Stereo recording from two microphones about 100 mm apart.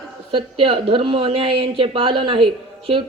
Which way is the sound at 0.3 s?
65° right (ahead or behind).